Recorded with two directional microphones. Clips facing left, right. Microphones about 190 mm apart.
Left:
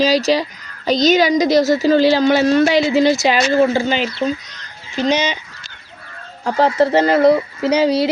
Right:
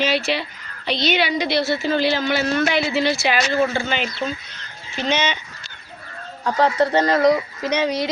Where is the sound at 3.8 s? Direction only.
35° left (ahead or behind).